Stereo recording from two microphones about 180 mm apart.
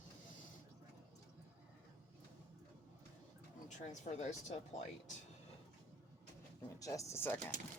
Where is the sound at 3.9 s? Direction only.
40° left (ahead or behind).